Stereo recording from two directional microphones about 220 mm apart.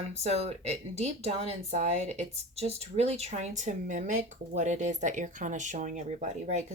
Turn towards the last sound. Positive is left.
turn(degrees=-30)  # may be behind; listen again after turning